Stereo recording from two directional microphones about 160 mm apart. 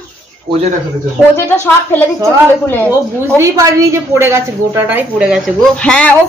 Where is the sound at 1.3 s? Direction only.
15° left (ahead or behind).